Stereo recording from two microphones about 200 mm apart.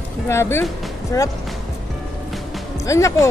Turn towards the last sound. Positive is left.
turn(degrees=15)  # may be behind; listen again after turning